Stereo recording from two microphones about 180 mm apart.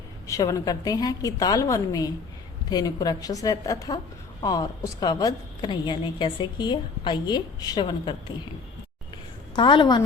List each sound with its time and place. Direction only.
0.3 s a woman's voice: 20° left (ahead or behind)
9.6 s a woman's voice: 25° left (ahead or behind)